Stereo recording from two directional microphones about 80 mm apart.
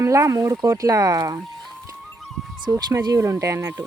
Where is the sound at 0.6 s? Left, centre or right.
Right.